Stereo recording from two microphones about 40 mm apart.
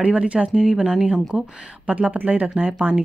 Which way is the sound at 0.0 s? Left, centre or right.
Right.